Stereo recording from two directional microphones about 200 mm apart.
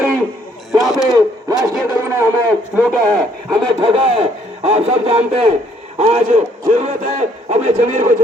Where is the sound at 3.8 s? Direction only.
25° right (ahead or behind).